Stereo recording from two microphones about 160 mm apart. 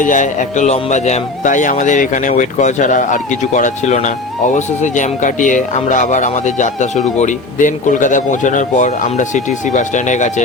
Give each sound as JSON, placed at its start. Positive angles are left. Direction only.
{"t": 0.0, "sound": "speech", "side_deg": 55}